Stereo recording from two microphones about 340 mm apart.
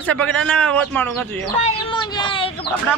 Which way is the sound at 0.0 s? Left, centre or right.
Centre.